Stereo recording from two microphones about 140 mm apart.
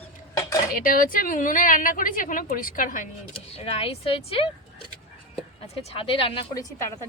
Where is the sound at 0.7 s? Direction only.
85° left.